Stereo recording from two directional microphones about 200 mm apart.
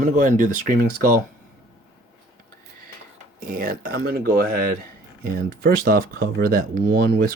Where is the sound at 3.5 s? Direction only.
45° right (ahead or behind).